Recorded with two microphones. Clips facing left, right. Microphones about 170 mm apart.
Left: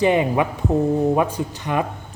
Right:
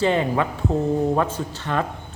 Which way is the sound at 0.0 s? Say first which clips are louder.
Left 3 dB; 15° left (ahead or behind).